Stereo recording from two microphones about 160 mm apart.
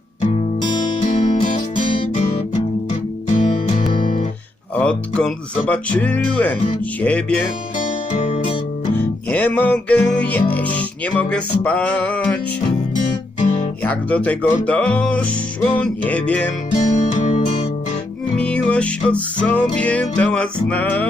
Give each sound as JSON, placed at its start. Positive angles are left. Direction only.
{"t": 1.0, "sound": "music", "side_deg": 40}
{"t": 4.7, "sound": "speech", "side_deg": 10}
{"t": 8.1, "sound": "music", "side_deg": 35}
{"t": 9.3, "sound": "speech", "side_deg": 10}
{"t": 13.8, "sound": "speech", "side_deg": 10}
{"t": 16.7, "sound": "music", "side_deg": 45}
{"t": 18.3, "sound": "music", "side_deg": 5}
{"t": 19.4, "sound": "speech", "side_deg": 10}